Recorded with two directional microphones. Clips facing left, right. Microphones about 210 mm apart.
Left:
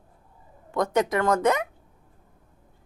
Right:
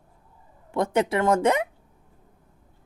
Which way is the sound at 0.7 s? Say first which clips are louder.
Even; 25° right (ahead or behind).